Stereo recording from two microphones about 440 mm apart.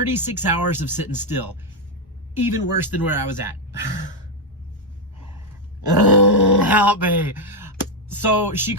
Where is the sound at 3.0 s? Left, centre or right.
Centre.